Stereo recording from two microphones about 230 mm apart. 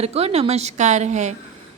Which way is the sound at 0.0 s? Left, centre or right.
Right.